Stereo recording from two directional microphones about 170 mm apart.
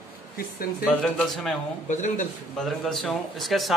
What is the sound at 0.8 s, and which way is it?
Speech, 5° left (ahead or behind).